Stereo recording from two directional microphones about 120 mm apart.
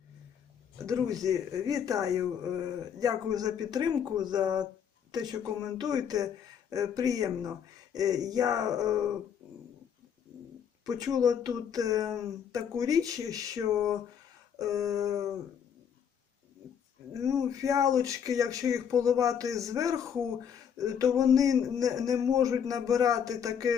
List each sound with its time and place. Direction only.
1.2 s a man's voice: 30° right (ahead or behind)
10.8 s a man's voice: 30° right (ahead or behind)
17.2 s a man's voice: 25° right (ahead or behind)